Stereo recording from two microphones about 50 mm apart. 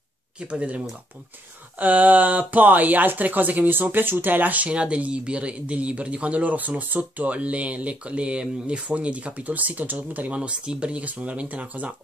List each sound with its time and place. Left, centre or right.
0.4 s speech: right